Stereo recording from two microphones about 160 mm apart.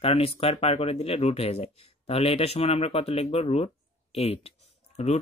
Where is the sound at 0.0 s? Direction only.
35° left (ahead or behind).